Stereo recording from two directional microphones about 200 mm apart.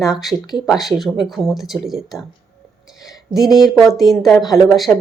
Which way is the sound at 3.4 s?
Centre (ahead or behind).